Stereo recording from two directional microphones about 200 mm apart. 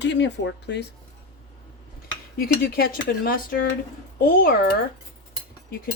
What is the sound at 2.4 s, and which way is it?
Speech, 50° left (ahead or behind).